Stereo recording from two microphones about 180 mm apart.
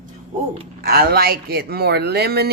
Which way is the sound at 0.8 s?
55° right (ahead or behind).